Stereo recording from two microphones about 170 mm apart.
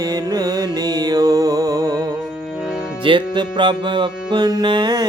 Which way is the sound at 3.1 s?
30° right (ahead or behind).